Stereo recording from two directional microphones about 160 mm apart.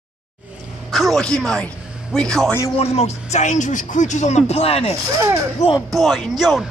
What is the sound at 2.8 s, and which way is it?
Speech, 40° left (ahead or behind).